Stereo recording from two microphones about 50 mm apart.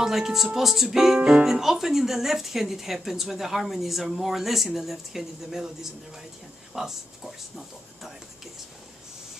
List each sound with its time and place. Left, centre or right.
0.0 s speech: centre